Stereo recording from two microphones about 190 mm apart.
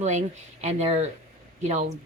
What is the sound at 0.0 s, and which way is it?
A woman's voice, 40° right (ahead or behind).